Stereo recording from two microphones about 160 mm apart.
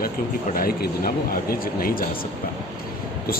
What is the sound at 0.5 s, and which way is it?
Speech, 65° left (ahead or behind).